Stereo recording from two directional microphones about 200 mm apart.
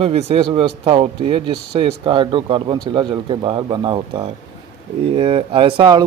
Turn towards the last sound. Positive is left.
turn(degrees=-25)  # may be behind; listen again after turning